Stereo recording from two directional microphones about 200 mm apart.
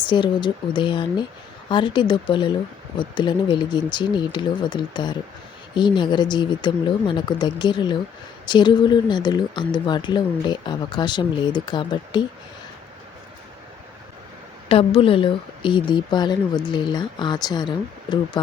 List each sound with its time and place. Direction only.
0.0 s speech: 25° left (ahead or behind)
14.7 s speech: 30° left (ahead or behind)